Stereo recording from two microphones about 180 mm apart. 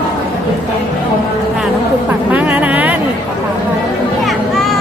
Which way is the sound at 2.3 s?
10° right (ahead or behind).